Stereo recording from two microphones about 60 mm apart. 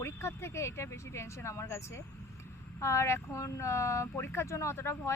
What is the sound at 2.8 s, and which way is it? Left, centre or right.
Speech, left.